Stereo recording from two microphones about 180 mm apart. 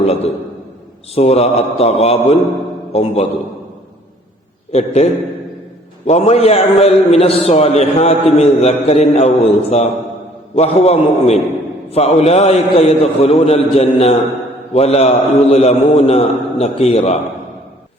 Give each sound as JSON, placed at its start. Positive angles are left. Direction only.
{"t": 0.0, "sound": "a man's voice", "side_deg": 35}
{"t": 4.7, "sound": "a man's voice", "side_deg": 35}
{"t": 6.1, "sound": "a man's voice", "side_deg": 35}